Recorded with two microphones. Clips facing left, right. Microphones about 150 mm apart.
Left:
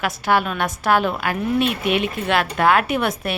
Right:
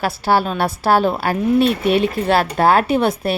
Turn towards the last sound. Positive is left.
turn(degrees=-30)  # may be behind; listen again after turning